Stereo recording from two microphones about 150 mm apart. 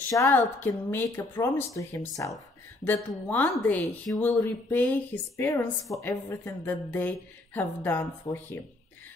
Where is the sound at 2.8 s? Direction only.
10° left (ahead or behind).